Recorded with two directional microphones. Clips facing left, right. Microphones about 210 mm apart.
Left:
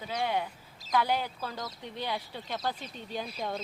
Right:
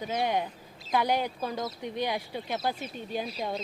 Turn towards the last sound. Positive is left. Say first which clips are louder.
# right 3 dB
turn(degrees=-10)  # may be behind; listen again after turning